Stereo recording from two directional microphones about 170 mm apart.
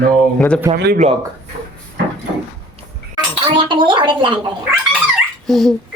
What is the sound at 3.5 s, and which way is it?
Speech, 30° right (ahead or behind).